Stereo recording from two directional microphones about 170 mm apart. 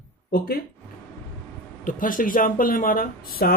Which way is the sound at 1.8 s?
50° left (ahead or behind).